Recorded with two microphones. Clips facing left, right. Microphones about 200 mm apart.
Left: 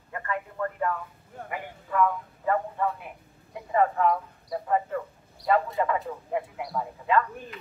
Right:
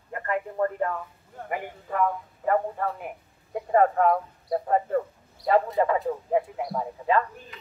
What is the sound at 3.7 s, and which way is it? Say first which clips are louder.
Speech: right 3 dB; 50° right (ahead or behind).